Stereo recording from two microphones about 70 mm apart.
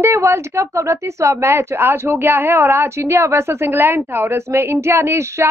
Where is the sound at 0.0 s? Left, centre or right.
Right.